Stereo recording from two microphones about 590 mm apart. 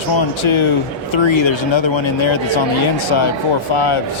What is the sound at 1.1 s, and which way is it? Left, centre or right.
Speech, left.